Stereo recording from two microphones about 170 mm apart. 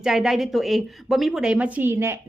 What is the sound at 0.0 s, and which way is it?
A woman's voice, centre (ahead or behind).